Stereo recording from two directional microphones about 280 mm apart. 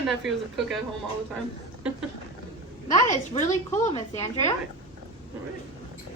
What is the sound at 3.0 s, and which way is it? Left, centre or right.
A woman's voice, left.